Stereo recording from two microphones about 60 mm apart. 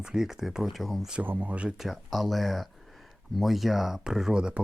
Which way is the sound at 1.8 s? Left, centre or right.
Centre.